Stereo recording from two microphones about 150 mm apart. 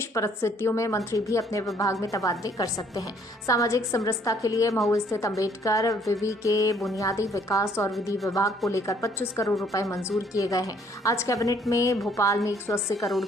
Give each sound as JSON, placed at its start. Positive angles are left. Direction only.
{"t": 0.0, "sound": "a woman's voice", "side_deg": 20}